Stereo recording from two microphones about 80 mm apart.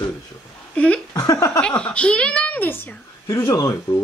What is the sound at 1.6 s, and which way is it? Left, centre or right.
A woman's voice, centre.